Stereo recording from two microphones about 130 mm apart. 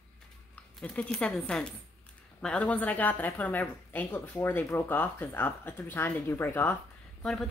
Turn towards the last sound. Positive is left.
turn(degrees=5)  # may be behind; listen again after turning